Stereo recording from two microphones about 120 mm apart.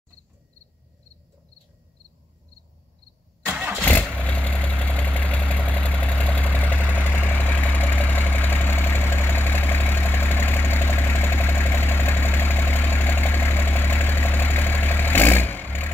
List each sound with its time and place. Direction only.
3.4 s vehicle: 15° right (ahead or behind)
3.8 s vehicle: 15° left (ahead or behind)